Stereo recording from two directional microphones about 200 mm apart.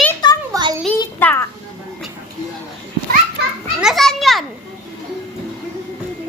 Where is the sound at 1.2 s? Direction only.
10° left (ahead or behind).